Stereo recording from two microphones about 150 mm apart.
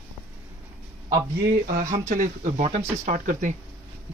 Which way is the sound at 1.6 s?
55° right (ahead or behind).